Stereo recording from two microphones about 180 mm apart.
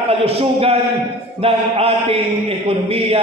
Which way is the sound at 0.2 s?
30° right (ahead or behind).